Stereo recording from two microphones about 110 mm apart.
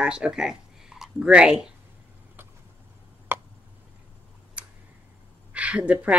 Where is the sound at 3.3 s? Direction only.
20° right (ahead or behind).